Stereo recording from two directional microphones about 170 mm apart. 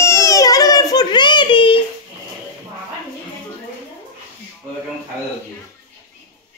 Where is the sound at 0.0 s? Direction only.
15° left (ahead or behind).